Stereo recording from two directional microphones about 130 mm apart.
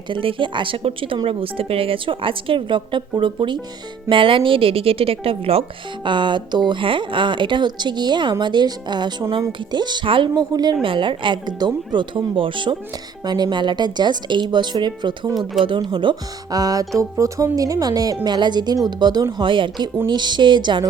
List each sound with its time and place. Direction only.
0.1 s speech: 40° right (ahead or behind)
6.1 s speech: 35° right (ahead or behind)